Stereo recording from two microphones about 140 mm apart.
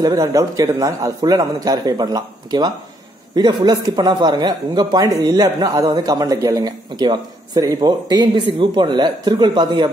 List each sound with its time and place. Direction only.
0.0 s a man's voice: 25° right (ahead or behind)